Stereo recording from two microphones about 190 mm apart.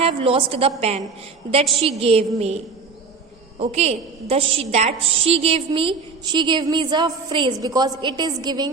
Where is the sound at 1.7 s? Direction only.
30° right (ahead or behind).